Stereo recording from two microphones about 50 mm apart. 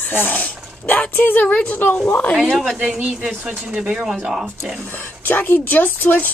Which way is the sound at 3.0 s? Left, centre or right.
Right.